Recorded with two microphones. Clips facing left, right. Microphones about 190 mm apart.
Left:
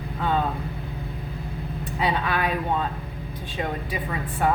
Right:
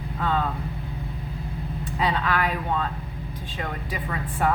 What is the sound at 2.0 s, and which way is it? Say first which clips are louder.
Speech: left 1 dB; 20° left (ahead or behind).